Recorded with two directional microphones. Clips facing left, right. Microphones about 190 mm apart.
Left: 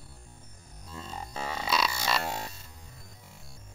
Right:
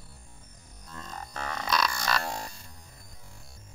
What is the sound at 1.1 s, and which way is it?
Music, 10° left (ahead or behind).